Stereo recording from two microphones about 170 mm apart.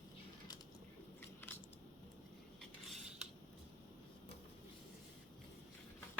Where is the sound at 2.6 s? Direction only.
Centre (ahead or behind).